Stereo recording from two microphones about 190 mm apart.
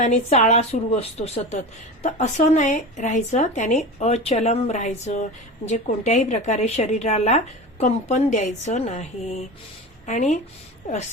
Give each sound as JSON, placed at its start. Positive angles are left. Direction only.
{"t": 0.0, "sound": "speech", "side_deg": 35}